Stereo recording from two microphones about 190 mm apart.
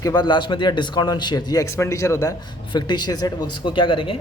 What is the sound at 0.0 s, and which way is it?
A man's voice, 20° left (ahead or behind).